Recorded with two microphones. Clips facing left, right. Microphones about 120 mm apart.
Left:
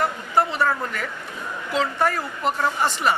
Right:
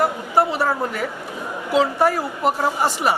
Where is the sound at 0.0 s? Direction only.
10° right (ahead or behind).